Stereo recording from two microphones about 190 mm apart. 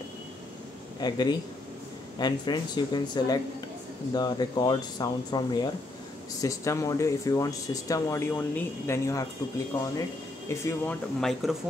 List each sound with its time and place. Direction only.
1.0 s speech: 20° left (ahead or behind)
10.5 s speech: 15° left (ahead or behind)
11.1 s speech: centre (ahead or behind)